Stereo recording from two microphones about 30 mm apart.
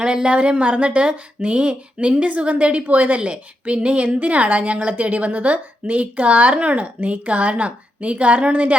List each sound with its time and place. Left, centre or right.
0.0 s speech: right
0.3 s a woman's voice: right
2.8 s a woman's voice: right
3.2 s a woman's voice: right